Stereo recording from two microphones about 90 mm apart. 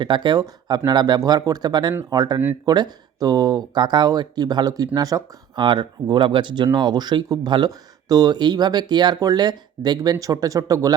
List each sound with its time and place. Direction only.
0.0 s speech: 60° right (ahead or behind); by 5.2 s 40° right (ahead or behind)
5.5 s speech: 60° right (ahead or behind); by 10.9 s 40° right (ahead or behind)